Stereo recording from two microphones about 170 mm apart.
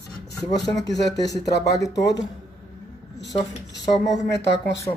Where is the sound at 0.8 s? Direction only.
90° left.